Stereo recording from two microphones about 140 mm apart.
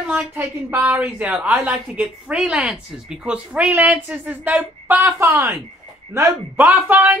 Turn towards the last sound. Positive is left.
turn(degrees=-15)  # may be behind; listen again after turning